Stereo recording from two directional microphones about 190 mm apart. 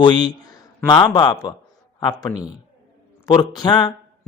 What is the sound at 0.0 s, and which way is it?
Speech, 25° left (ahead or behind).